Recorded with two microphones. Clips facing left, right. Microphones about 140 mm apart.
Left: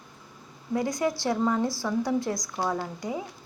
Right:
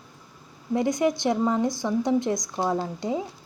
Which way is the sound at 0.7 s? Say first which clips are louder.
Right 4 dB; 20° right (ahead or behind).